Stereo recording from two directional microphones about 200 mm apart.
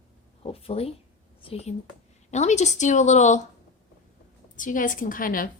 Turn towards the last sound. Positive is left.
turn(degrees=45)  # may be behind; listen again after turning